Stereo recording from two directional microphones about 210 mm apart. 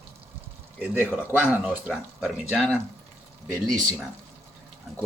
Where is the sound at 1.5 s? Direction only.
5° right (ahead or behind).